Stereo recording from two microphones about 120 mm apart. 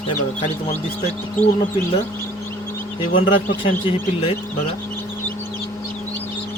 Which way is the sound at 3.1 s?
45° left (ahead or behind).